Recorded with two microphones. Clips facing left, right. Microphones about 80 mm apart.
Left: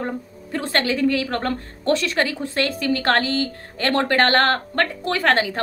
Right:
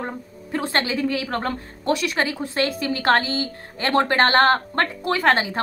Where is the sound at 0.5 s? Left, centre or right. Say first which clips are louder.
Left 1 dB; right.